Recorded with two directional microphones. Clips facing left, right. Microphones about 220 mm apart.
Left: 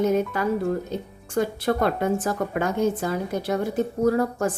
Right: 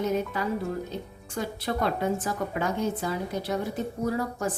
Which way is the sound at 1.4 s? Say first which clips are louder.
Left 7 dB; 55° left (ahead or behind).